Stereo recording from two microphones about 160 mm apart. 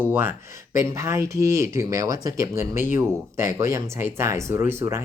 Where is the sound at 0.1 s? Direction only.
15° right (ahead or behind).